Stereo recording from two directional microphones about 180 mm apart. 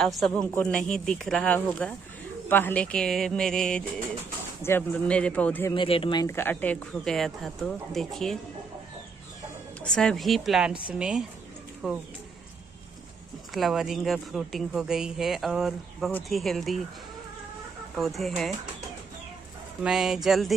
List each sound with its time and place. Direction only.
0.0 s speech: centre (ahead or behind)
5.7 s speech: 30° left (ahead or behind)
6.2 s speech: 10° left (ahead or behind)
9.8 s speech: 5° left (ahead or behind)
13.5 s speech: centre (ahead or behind)
17.9 s speech: centre (ahead or behind)
19.8 s speech: centre (ahead or behind)